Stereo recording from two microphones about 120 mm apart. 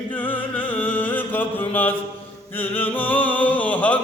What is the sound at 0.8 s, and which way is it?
Mantra, 15° left (ahead or behind).